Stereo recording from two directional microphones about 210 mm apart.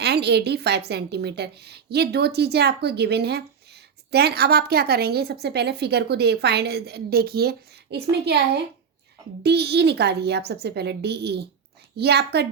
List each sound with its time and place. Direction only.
0.0 s a woman's voice: 50° right (ahead or behind)